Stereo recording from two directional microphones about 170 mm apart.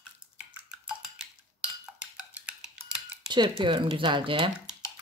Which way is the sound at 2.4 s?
5° right (ahead or behind).